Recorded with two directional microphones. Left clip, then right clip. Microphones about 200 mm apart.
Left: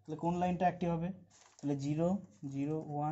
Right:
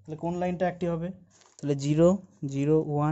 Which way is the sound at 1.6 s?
45° right (ahead or behind).